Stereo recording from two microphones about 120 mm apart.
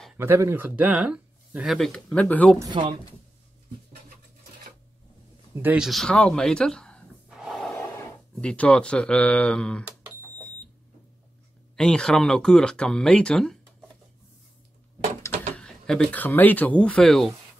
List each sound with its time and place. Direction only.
0.2 s speech: 20° right (ahead or behind); by 2.5 s 10° left (ahead or behind)
2.8 s speech: 50° right (ahead or behind)
5.5 s speech: 15° right (ahead or behind)
5.8 s speech: centre (ahead or behind)
7.4 s a sound: 5° right (ahead or behind)
7.7 s speech: 10° left (ahead or behind)
11.7 s speech: 5° left (ahead or behind)
15.5 s a sound: 5° left (ahead or behind)
16.3 s speech: 15° left (ahead or behind)